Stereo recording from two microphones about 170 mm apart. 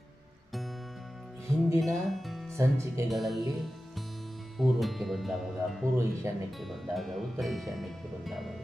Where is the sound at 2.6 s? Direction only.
15° right (ahead or behind).